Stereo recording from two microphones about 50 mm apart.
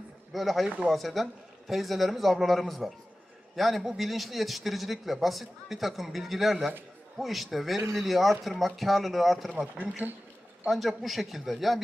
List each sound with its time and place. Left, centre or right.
0.3 s a man's voice: centre
9.6 s speech: right
10.7 s a man's voice: centre